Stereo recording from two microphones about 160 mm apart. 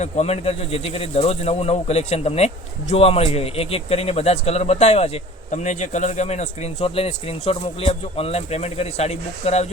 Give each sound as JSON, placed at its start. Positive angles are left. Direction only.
{"t": 0.0, "sound": "a man's voice", "side_deg": 40}